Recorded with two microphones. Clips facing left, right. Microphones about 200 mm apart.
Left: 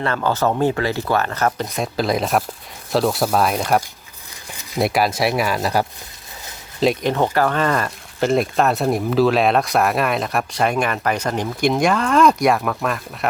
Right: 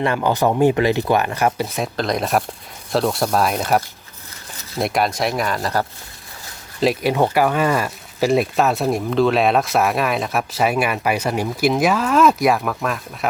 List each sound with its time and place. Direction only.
0.0 s speech: 15° right (ahead or behind)
1.7 s speech: centre (ahead or behind)
4.8 s speech: 5° left (ahead or behind)
6.7 s speech: 5° right (ahead or behind)